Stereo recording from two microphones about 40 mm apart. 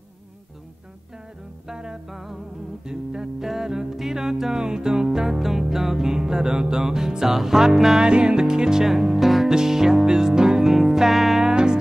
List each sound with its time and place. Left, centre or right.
1.7 s music: centre
2.0 s music: centre
2.8 s music: centre
8.1 s music: right
8.8 s music: centre
11.4 s music: centre